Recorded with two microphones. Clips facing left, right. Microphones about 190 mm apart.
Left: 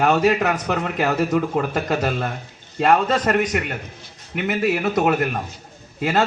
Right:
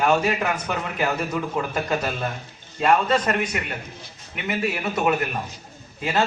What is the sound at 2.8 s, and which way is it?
A man's voice, 55° left (ahead or behind).